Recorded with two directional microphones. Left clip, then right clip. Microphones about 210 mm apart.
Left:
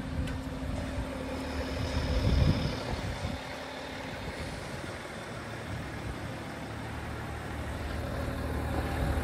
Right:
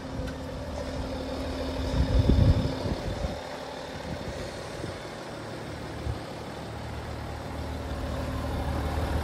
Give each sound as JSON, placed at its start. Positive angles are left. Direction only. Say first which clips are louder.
{"t": 2.0, "sound": "vehicle", "louder": "right 6 dB", "side_deg": -55}